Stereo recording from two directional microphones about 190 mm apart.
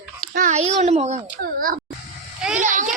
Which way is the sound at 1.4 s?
50° right (ahead or behind).